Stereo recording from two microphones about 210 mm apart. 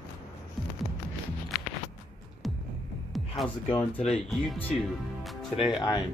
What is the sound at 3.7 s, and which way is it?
Speech, 25° left (ahead or behind).